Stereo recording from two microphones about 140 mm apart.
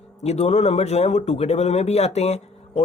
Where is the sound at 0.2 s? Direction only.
50° left (ahead or behind).